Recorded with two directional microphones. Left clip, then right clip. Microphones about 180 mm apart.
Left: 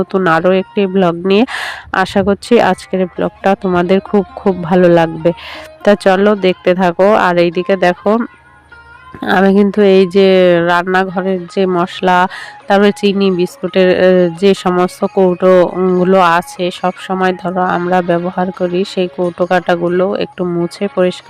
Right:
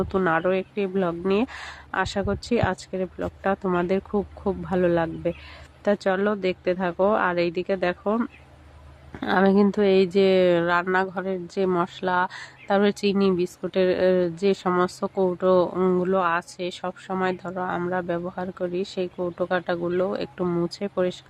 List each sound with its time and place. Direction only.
0.3 s speech: 45° left (ahead or behind)
9.2 s speech: 40° left (ahead or behind)
15.7 s speech: 30° left (ahead or behind)
16.0 s speech: 45° left (ahead or behind)